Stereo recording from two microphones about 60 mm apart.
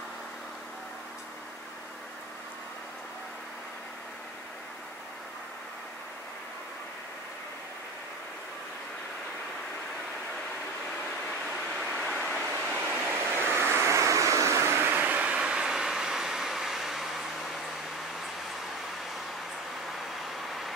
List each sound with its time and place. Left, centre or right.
11.7 s vehicle: centre
12.7 s vehicle: right
14.8 s vehicle: right; by 17.5 s centre
20.2 s vehicle: centre